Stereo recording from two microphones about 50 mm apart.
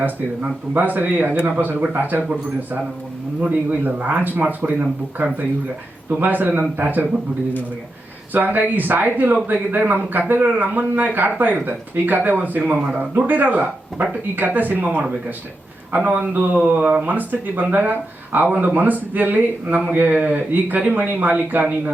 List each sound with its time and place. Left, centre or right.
0.9 s speech: right
8.3 s speech: right
15.9 s speech: right